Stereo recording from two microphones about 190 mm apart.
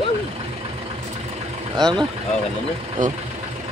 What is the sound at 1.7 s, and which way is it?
Speech, 25° right (ahead or behind).